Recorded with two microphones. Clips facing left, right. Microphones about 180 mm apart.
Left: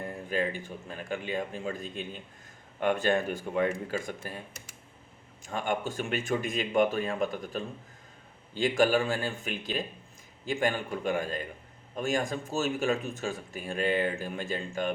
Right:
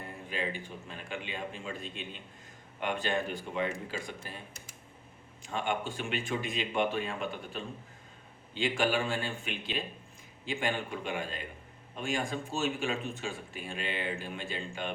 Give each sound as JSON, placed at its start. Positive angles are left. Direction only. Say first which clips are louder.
{"t": 0.0, "sound": "speech", "louder": "left 6 dB", "side_deg": 45}
{"t": 5.4, "sound": "a man's voice", "louder": "left 2 dB", "side_deg": 45}